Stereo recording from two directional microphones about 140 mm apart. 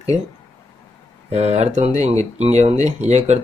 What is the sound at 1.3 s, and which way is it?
Speech, 50° right (ahead or behind).